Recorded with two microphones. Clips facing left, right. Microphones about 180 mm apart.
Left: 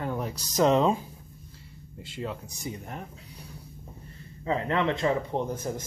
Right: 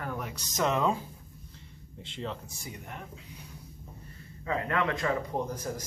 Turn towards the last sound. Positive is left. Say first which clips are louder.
# left 3 dB
turn(degrees=25)  # may be behind; listen again after turning